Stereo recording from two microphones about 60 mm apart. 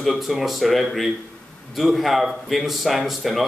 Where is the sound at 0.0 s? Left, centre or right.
Centre.